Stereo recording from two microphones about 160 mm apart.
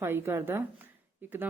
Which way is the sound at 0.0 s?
15° right (ahead or behind).